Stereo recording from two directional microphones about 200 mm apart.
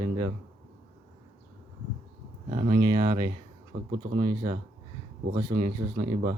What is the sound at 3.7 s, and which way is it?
Speech, 50° right (ahead or behind).